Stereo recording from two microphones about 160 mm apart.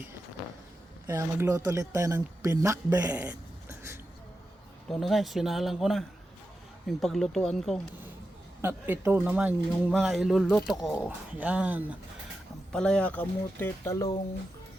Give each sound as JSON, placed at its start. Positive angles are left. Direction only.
{"t": 1.0, "sound": "speech", "side_deg": -20}
{"t": 3.2, "sound": "a sound", "side_deg": -15}
{"t": 4.9, "sound": "speech", "side_deg": 0}
{"t": 8.6, "sound": "speech", "side_deg": -10}
{"t": 12.7, "sound": "speech", "side_deg": 5}